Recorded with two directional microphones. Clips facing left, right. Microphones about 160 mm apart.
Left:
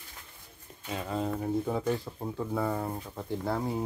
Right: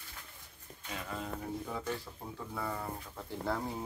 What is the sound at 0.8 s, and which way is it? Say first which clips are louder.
Speech: left 8 dB; 30° left (ahead or behind).